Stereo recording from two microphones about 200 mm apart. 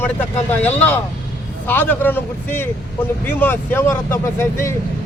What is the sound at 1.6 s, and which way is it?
Speech, 10° left (ahead or behind).